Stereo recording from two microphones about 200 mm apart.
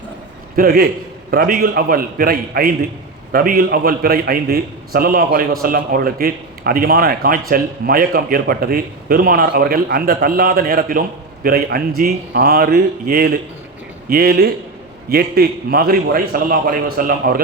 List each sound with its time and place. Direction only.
0.5 s a man's voice: 50° right (ahead or behind)